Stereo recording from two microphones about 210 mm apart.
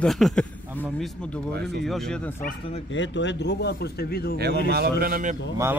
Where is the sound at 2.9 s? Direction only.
60° left (ahead or behind).